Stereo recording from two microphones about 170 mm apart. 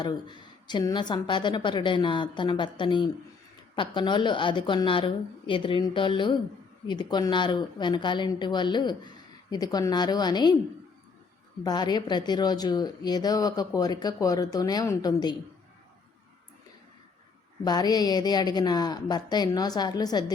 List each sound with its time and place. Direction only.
0.0 s a woman's voice: 25° left (ahead or behind)
11.6 s a woman's voice: 25° left (ahead or behind)
17.6 s a woman's voice: 25° left (ahead or behind)